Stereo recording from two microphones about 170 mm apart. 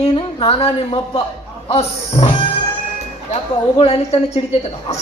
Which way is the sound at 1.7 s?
35° left (ahead or behind).